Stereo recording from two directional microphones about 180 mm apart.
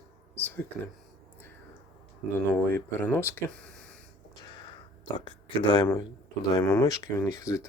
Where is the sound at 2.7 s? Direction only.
10° left (ahead or behind).